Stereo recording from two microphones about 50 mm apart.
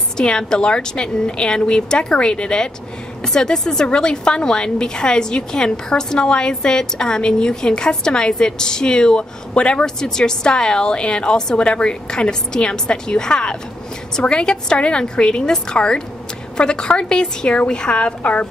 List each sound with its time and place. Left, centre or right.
0.2 s a woman's voice: centre